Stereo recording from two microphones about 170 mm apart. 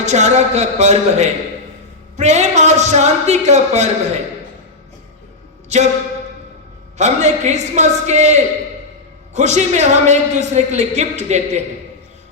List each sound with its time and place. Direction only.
0.0 s speech: 40° right (ahead or behind)
5.6 s speech: 40° right (ahead or behind)
7.0 s speech: 45° right (ahead or behind)